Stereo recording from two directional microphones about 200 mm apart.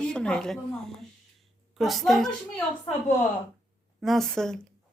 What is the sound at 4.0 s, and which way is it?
Speech, centre (ahead or behind).